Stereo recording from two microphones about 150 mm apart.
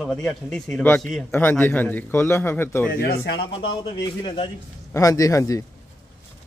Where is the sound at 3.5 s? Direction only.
35° left (ahead or behind).